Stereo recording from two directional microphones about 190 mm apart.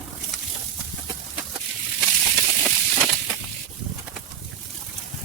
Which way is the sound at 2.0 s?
Centre (ahead or behind).